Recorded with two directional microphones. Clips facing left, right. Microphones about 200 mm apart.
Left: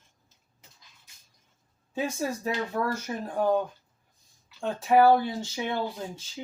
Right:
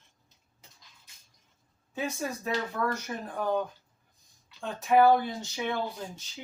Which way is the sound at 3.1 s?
20° left (ahead or behind).